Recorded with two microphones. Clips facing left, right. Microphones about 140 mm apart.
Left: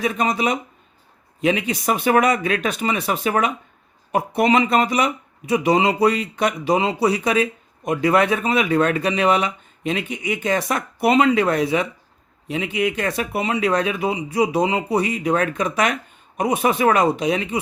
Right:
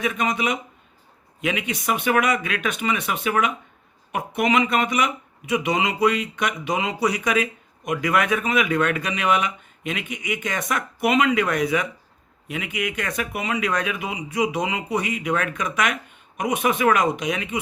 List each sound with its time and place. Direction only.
0.0 s speech: 35° left (ahead or behind)